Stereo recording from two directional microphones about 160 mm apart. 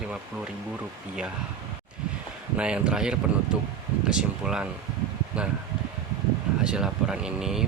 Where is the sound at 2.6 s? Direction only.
5° right (ahead or behind).